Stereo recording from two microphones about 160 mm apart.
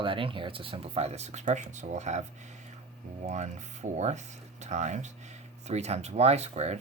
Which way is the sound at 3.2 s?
45° right (ahead or behind).